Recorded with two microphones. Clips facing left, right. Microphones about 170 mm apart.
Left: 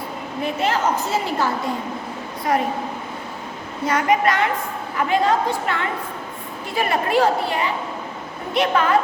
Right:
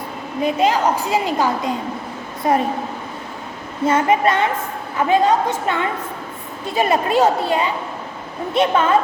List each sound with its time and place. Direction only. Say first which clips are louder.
0.4 s a woman's voice: right 4 dB; 15° right (ahead or behind)
2.5 s a woman's voice: right 3 dB; 25° right (ahead or behind)
3.8 s a woman's voice: right 3 dB; 25° right (ahead or behind)